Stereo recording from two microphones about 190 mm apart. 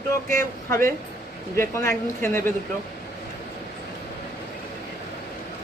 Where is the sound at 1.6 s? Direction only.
15° left (ahead or behind).